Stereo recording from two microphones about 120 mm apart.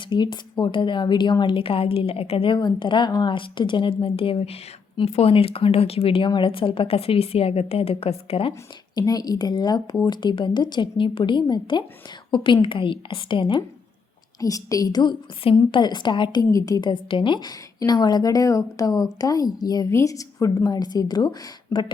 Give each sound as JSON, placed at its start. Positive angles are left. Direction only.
{"t": 0.1, "sound": "a woman's voice", "side_deg": 40}
{"t": 2.6, "sound": "a woman's voice", "side_deg": 40}
{"t": 9.0, "sound": "a woman's voice", "side_deg": 35}
{"t": 14.4, "sound": "a woman's voice", "side_deg": 30}
{"t": 16.4, "sound": "a woman's voice", "side_deg": 30}
{"t": 16.9, "sound": "a woman's voice", "side_deg": 45}